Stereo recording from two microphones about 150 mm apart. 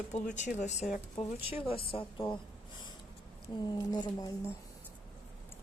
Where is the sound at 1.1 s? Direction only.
35° left (ahead or behind).